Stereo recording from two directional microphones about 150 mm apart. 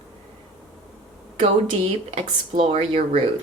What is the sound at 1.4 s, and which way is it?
Speech, 40° right (ahead or behind).